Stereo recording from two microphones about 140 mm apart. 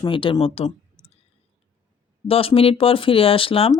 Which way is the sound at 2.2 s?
40° left (ahead or behind).